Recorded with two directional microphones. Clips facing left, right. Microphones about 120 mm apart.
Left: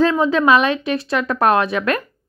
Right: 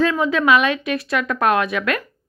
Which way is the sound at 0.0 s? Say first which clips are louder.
Left 3 dB; 30° left (ahead or behind).